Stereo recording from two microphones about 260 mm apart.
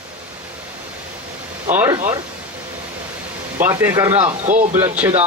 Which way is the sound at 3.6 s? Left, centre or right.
Centre.